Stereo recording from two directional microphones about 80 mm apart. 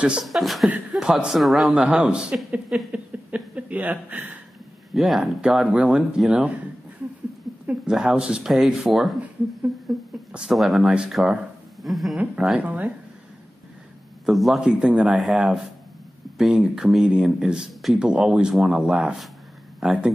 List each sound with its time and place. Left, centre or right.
0.0 s speech: centre
1.8 s speech: centre
2.9 s a sound: centre
4.9 s speech: centre
7.8 s speech: centre
10.3 s speech: centre
12.2 s speech: centre
14.2 s speech: centre